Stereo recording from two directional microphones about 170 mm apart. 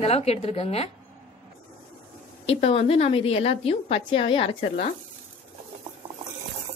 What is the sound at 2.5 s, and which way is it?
A woman's voice, 35° left (ahead or behind).